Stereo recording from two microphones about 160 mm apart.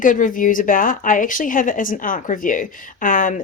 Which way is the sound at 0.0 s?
55° left (ahead or behind).